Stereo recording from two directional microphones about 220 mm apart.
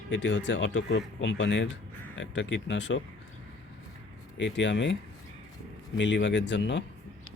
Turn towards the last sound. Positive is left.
turn(degrees=55)  # may be behind; listen again after turning